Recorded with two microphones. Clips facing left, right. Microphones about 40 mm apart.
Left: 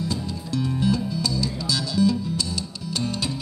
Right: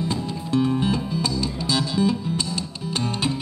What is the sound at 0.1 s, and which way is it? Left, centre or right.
Music, right.